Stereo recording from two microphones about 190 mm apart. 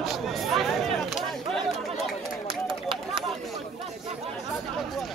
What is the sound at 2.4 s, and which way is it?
Run, 25° right (ahead or behind).